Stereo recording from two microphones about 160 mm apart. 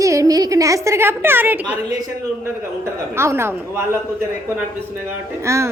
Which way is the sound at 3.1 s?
15° right (ahead or behind).